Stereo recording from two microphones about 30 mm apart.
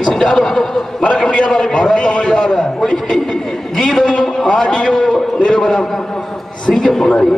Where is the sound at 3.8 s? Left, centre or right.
Centre.